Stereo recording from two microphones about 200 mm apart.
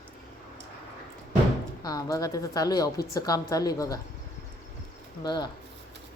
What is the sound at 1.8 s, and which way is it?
A woman's voice, 20° left (ahead or behind).